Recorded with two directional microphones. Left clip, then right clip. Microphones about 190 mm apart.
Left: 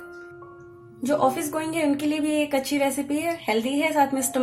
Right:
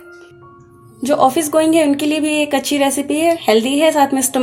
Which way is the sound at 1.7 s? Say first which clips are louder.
Right 10 dB; 40° right (ahead or behind).